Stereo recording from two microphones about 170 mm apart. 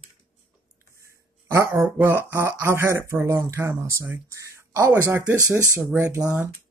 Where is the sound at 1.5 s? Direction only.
15° right (ahead or behind).